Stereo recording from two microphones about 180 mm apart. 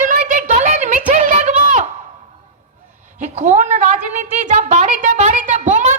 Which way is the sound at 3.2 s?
40° right (ahead or behind).